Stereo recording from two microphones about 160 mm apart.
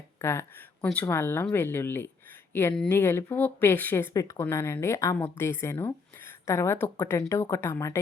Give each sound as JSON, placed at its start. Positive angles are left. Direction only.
{"t": 0.2, "sound": "speech", "side_deg": 15}